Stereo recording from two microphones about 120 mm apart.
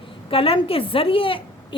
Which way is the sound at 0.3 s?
50° left (ahead or behind).